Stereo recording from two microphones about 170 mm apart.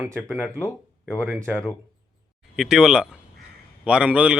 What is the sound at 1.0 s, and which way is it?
Speech, 5° left (ahead or behind).